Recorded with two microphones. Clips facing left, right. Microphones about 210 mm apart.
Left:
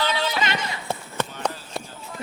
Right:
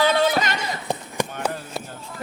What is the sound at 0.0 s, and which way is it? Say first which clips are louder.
Clip-clop: right 6 dB; 50° right (ahead or behind).